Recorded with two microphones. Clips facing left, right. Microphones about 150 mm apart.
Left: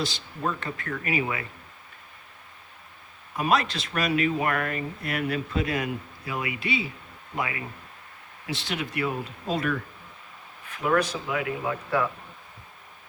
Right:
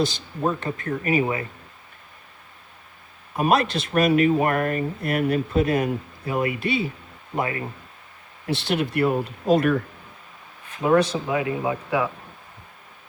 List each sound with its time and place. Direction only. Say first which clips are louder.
0.6 s speech: right 6 dB; 25° right (ahead or behind)
1.0 s speech: right 6 dB; 35° right (ahead or behind)
3.3 s speech: right 4 dB; 50° right (ahead or behind)
7.3 s speech: right 5 dB; 40° right (ahead or behind)
8.4 s speech: right 8 dB; 65° right (ahead or behind)
10.8 s speech: right 5 dB; 25° right (ahead or behind)